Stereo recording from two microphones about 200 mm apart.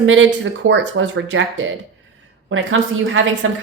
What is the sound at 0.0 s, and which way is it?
Speech, 75° right (ahead or behind).